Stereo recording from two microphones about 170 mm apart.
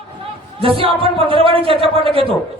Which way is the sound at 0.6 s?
30° right (ahead or behind).